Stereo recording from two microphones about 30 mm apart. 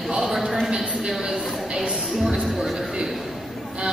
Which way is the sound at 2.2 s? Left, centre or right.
Centre.